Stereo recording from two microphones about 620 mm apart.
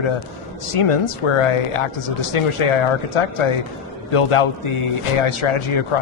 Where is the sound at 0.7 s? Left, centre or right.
Left.